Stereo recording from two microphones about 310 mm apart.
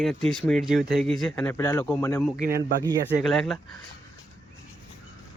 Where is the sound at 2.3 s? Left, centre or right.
Right.